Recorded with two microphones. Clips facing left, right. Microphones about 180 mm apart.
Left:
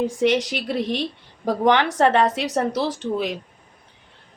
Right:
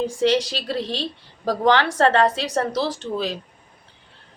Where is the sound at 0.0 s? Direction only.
20° left (ahead or behind).